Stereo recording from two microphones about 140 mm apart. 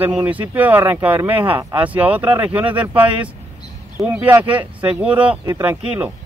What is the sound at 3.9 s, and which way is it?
Speech, 10° right (ahead or behind).